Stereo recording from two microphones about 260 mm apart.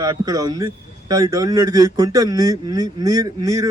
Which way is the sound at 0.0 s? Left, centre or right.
Centre.